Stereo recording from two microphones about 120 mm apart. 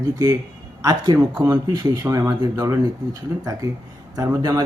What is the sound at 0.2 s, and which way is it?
Speech, 30° right (ahead or behind).